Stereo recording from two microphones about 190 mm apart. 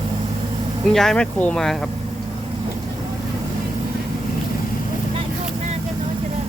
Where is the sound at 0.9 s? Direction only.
Centre (ahead or behind).